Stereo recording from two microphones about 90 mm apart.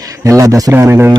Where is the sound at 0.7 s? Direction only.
25° right (ahead or behind).